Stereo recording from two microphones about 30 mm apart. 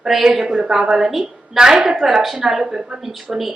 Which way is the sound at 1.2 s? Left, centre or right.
Right.